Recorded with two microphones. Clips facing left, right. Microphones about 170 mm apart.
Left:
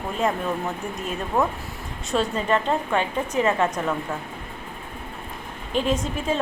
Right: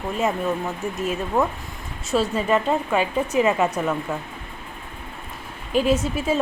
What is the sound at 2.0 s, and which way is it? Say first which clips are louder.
A woman's voice: right 2 dB; 5° right (ahead or behind).